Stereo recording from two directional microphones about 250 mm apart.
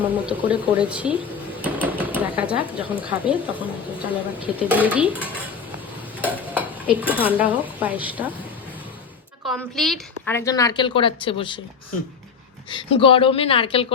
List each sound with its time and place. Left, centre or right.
0.0 s speech: centre
6.2 s stir: centre
7.1 s speech: centre
9.5 s a woman's voice: centre
12.7 s speech: left